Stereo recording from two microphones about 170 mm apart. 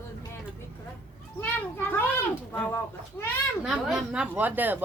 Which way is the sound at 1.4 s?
10° left (ahead or behind).